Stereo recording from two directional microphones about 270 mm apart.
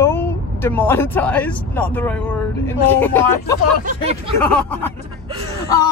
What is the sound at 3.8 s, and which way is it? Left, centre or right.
Speech, right.